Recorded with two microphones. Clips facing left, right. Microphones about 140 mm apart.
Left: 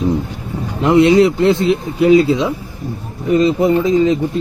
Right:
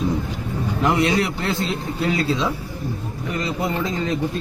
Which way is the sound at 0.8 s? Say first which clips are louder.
Left 10 dB; 25° left (ahead or behind).